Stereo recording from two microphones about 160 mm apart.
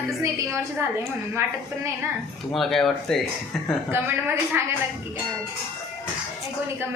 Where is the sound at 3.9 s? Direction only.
15° right (ahead or behind).